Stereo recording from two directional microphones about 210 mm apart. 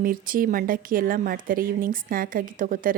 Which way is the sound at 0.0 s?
45° right (ahead or behind).